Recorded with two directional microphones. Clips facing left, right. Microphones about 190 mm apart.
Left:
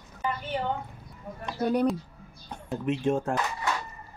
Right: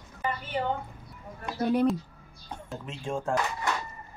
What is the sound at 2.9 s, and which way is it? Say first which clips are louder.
Speech: left 7 dB; 60° left (ahead or behind).